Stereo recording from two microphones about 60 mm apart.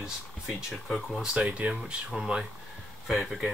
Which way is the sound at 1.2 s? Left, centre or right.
Centre.